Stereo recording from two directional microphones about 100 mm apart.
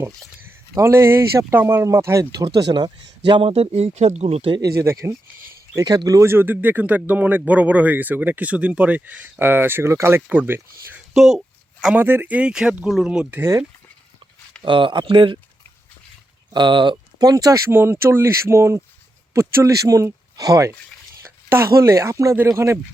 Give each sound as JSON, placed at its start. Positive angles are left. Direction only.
{"t": 0.8, "sound": "speech", "side_deg": -25}
{"t": 2.3, "sound": "speech", "side_deg": -45}
{"t": 3.5, "sound": "speech", "side_deg": -90}
{"t": 4.6, "sound": "speech", "side_deg": -30}
{"t": 5.8, "sound": "speech", "side_deg": -40}
{"t": 11.1, "sound": "a sound", "side_deg": -5}
{"t": 11.9, "sound": "speech", "side_deg": -20}
{"t": 13.4, "sound": "speech", "side_deg": -30}
{"t": 14.6, "sound": "speech", "side_deg": -55}
{"t": 16.5, "sound": "speech", "side_deg": -50}
{"t": 17.7, "sound": "speech", "side_deg": -25}